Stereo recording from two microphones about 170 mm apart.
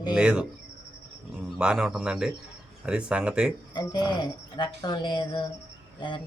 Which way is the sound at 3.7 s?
25° left (ahead or behind).